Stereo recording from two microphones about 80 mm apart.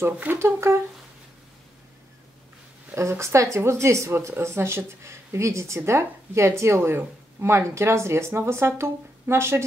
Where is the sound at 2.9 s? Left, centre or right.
Right.